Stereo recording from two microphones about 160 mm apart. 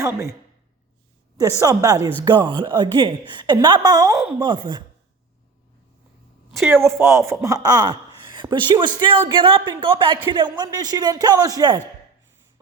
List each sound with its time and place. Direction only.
0.0 s a woman's voice: 15° right (ahead or behind)
1.4 s speech: 20° right (ahead or behind)
4.1 s speech: 5° right (ahead or behind)
4.4 s speech: 30° right (ahead or behind)
6.7 s a woman's voice: 15° right (ahead or behind)